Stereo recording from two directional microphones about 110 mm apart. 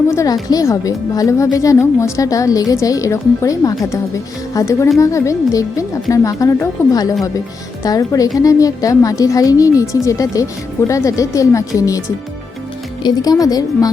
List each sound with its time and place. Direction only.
0.1 s a woman's voice: 30° left (ahead or behind)